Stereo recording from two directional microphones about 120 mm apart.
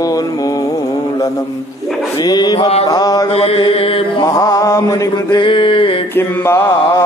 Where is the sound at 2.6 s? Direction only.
55° left (ahead or behind).